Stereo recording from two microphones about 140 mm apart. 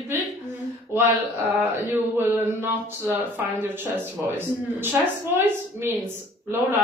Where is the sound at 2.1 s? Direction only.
15° right (ahead or behind).